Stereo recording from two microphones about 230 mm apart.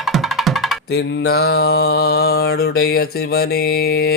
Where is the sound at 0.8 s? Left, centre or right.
Left.